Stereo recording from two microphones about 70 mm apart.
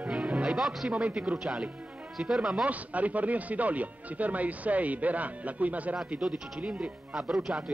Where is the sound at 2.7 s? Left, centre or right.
Right.